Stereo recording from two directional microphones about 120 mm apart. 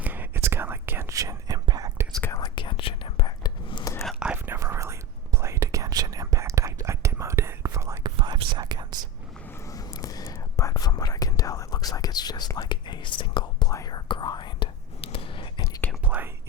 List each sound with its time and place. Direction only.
0.0 s whispering: 15° right (ahead or behind); by 1.9 s 35° right (ahead or behind)
2.4 s whispering: 40° left (ahead or behind)
4.0 s whispering: centre (ahead or behind)
4.3 s whispering: 20° right (ahead or behind)
8.0 s whispering: 40° right (ahead or behind)
9.5 s a sound: 25° left (ahead or behind)
10.3 s whispering: 25° left (ahead or behind); by 13.7 s 40° left (ahead or behind)
13.7 s whispering: 30° left (ahead or behind); by 15.6 s 45° left (ahead or behind)
16.0 s whispering: 15° right (ahead or behind)